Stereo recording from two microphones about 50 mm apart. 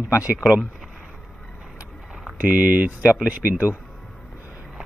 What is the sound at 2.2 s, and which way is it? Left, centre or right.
Speech, right.